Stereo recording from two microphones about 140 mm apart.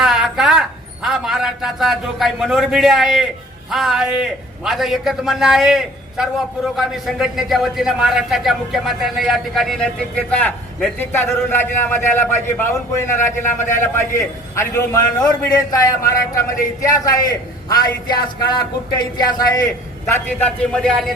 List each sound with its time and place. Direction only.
0.0 s a sound: centre (ahead or behind)
1.0 s a man's voice: centre (ahead or behind); by 17.2 s 25° left (ahead or behind)
18.9 s speech: 30° left (ahead or behind)
20.1 s a man's voice: 15° left (ahead or behind)